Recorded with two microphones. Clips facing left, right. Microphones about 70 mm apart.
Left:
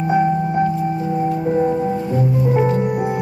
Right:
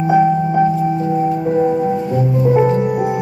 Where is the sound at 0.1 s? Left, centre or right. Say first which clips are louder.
Right 4 dB; centre.